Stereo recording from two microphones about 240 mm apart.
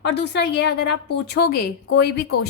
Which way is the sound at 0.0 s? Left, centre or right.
Left.